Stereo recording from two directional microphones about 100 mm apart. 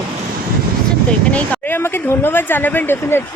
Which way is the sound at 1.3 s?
15° left (ahead or behind).